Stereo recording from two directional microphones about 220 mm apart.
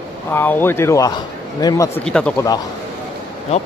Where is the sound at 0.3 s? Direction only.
10° left (ahead or behind).